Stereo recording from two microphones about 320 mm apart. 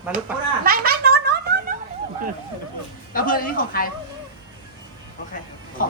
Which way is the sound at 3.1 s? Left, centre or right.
Left.